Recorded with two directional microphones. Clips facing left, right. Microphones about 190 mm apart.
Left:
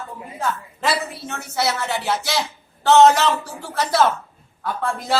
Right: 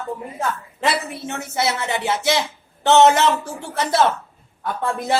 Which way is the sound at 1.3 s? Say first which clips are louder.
Right 1 dB; 20° right (ahead or behind).